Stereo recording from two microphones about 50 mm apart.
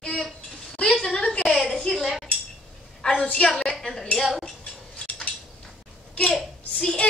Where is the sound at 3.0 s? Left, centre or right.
Centre.